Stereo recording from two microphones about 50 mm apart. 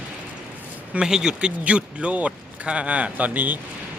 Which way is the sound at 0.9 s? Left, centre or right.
Centre.